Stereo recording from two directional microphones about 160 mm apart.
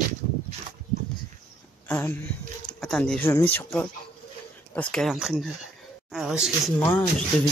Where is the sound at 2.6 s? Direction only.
5° left (ahead or behind).